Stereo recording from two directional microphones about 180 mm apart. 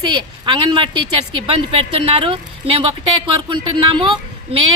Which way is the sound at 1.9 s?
30° right (ahead or behind).